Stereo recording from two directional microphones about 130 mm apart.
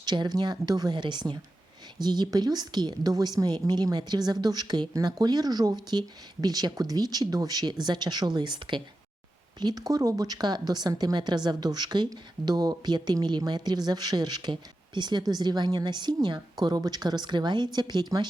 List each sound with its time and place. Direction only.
0.0 s a woman's voice: 35° right (ahead or behind)